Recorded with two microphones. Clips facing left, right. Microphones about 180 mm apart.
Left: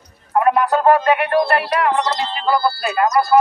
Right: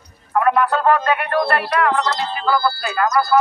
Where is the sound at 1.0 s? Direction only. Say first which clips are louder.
Left 3 dB; 15° left (ahead or behind).